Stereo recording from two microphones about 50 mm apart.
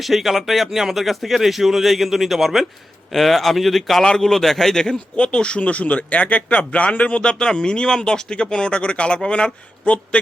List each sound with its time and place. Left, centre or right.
0.0 s speech: centre
5.1 s speech: left